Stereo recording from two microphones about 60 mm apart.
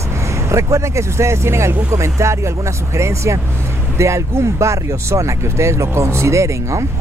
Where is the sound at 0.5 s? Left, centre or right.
Right.